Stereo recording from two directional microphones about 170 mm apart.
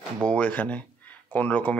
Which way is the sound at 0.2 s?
5° left (ahead or behind).